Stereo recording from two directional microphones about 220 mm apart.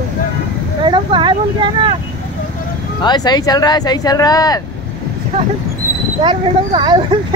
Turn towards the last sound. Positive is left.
turn(degrees=-20)  # may be behind; listen again after turning